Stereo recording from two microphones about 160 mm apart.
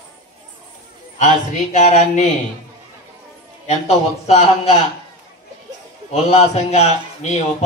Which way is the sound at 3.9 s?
40° left (ahead or behind).